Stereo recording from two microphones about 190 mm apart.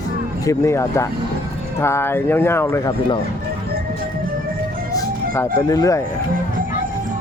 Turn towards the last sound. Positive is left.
turn(degrees=15)  # may be behind; listen again after turning